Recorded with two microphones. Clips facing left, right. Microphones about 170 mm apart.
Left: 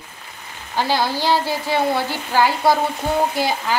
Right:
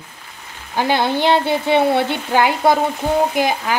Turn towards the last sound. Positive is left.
turn(degrees=-15)  # may be behind; listen again after turning